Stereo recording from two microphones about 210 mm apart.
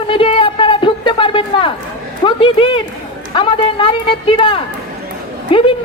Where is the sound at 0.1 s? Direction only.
25° left (ahead or behind).